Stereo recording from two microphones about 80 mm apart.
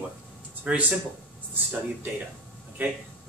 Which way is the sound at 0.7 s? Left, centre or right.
Centre.